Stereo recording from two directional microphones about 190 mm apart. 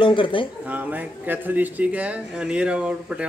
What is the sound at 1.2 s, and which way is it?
Speech, 10° right (ahead or behind).